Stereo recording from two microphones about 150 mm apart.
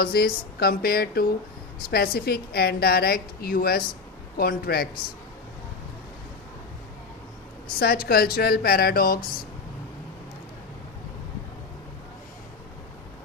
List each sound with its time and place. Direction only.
0.0 s a woman's voice: 85° left
8.0 s a woman's voice: 90° left